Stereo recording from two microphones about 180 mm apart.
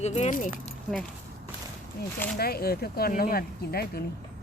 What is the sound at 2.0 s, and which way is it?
Speech, 60° left (ahead or behind).